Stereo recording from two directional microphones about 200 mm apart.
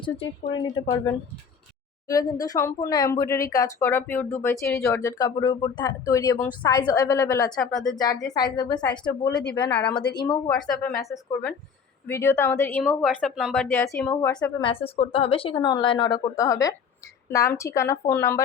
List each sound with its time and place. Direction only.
0.0 s a woman's voice: 25° left (ahead or behind)
2.0 s speech: 15° left (ahead or behind)
7.5 s speech: centre (ahead or behind)
7.9 s a woman's voice: 20° left (ahead or behind)
9.6 s speech: 10° left (ahead or behind)
10.2 s a woman's voice: 20° left (ahead or behind)
14.6 s a woman's voice: 30° left (ahead or behind)